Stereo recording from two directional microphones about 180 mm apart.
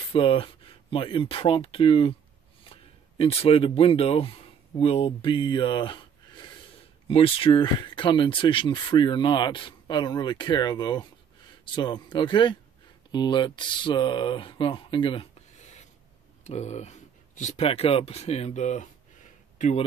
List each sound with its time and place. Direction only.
0.1 s speech: 30° left (ahead or behind)